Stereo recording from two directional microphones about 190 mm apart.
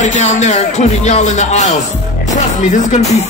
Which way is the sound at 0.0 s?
40° left (ahead or behind).